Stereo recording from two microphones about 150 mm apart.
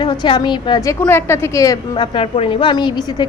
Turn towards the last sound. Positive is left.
turn(degrees=30)  # may be behind; listen again after turning